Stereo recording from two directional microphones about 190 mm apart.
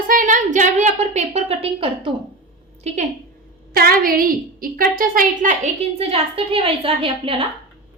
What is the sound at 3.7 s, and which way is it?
A woman's voice, 50° right (ahead or behind).